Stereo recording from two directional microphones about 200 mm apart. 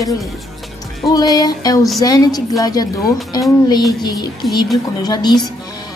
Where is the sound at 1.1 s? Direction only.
20° left (ahead or behind).